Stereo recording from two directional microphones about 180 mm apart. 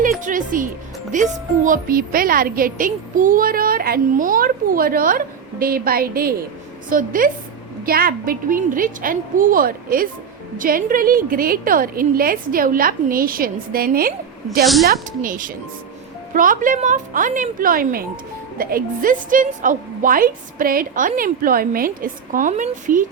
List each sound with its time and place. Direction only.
0.0 s a woman's voice: 50° right (ahead or behind)
14.6 s a woman's voice: centre (ahead or behind)
15.2 s a woman's voice: 50° right (ahead or behind)